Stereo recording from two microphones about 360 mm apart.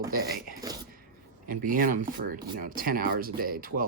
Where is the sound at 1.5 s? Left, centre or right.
Right.